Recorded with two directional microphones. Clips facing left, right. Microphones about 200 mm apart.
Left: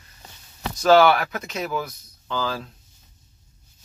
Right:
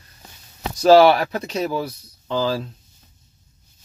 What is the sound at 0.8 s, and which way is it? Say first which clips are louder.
Speech: right 4 dB; 35° right (ahead or behind).